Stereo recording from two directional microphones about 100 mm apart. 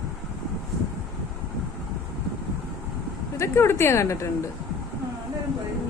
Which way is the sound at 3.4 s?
25° left (ahead or behind).